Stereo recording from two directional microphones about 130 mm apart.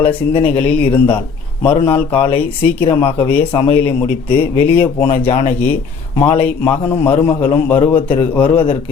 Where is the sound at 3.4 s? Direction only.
50° left (ahead or behind).